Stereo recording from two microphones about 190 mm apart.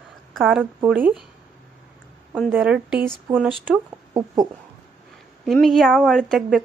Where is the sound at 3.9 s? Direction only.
20° right (ahead or behind).